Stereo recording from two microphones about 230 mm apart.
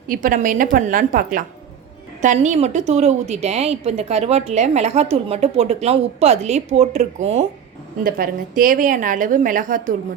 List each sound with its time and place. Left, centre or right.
0.1 s a woman's voice: right